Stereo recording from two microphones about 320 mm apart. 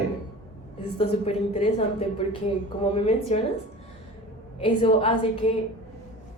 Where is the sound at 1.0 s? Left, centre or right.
Centre.